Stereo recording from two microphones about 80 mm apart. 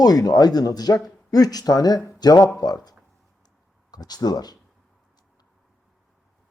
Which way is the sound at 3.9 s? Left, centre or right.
Left.